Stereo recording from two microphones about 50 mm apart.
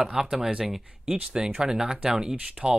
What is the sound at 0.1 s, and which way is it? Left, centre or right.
Speech, centre.